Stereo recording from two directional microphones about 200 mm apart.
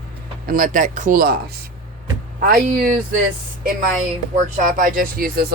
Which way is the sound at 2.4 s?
45° right (ahead or behind).